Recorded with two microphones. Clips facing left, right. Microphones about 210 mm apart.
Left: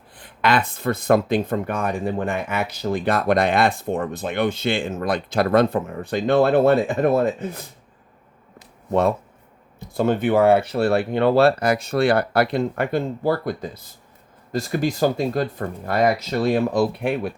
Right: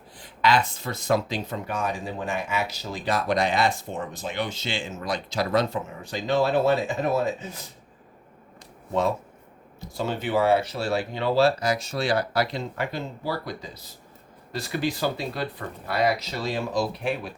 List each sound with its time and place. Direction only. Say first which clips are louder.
0.2 s speech: left 2 dB; 55° left (ahead or behind)
8.9 s speech: left 5 dB; 60° left (ahead or behind)